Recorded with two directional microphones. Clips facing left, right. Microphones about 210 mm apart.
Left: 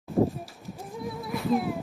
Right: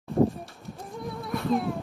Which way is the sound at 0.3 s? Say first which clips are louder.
Even; centre (ahead or behind).